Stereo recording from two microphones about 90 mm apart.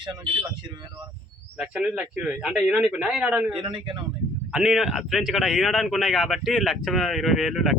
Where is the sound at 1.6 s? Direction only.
10° right (ahead or behind).